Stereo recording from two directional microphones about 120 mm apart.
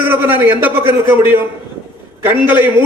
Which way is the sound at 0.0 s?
15° right (ahead or behind).